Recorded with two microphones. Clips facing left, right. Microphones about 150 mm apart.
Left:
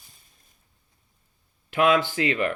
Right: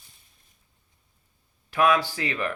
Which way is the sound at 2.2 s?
60° left (ahead or behind).